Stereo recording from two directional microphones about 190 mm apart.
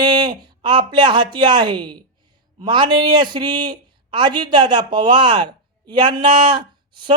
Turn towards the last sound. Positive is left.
turn(degrees=-25)  # may be behind; listen again after turning